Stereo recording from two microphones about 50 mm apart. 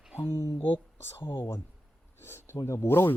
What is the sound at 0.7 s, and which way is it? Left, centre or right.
Speech, left.